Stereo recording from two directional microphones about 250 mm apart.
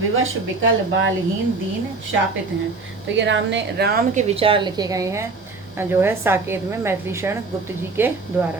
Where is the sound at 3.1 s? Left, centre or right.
Right; by 8.5 s centre.